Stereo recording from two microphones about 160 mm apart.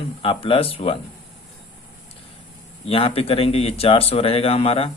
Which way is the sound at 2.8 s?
35° left (ahead or behind).